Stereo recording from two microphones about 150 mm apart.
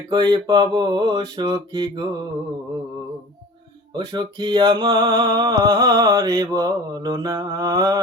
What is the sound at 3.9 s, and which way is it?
Mantra, 30° right (ahead or behind).